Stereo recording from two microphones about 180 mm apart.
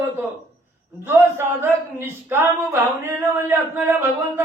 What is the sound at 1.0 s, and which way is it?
Speech, 15° right (ahead or behind).